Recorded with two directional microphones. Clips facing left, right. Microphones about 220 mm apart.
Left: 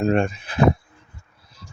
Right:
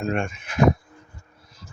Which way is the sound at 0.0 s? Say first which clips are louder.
Left 6 dB; 35° left (ahead or behind).